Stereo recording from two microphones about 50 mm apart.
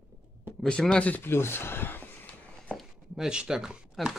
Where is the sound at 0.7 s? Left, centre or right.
Centre.